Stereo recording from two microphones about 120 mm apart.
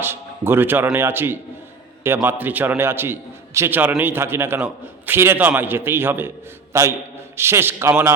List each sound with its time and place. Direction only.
0.0 s a man's voice: 20° right (ahead or behind)